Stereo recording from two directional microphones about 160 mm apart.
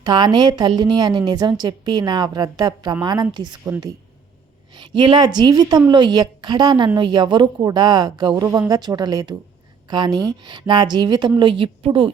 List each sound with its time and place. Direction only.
0.0 s a woman's voice: 25° right (ahead or behind)
4.8 s a woman's voice: 30° right (ahead or behind)